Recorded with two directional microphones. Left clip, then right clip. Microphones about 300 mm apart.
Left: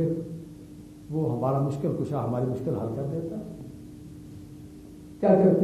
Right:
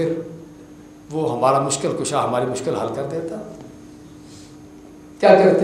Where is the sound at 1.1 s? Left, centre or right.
Right.